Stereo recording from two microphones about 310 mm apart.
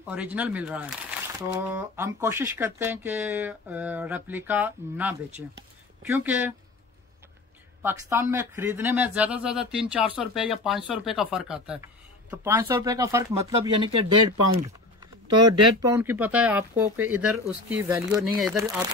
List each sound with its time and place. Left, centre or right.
0.1 s speech: centre
5.6 s a sound: centre
7.8 s speech: centre
15.8 s speech: centre